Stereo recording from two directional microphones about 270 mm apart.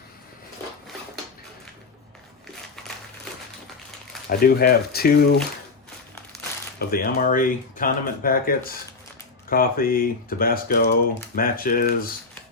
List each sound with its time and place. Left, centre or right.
4.3 s speech: left
6.7 s speech: left